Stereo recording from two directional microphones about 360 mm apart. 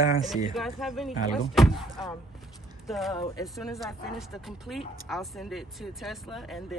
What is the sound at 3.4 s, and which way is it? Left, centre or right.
Speech, centre.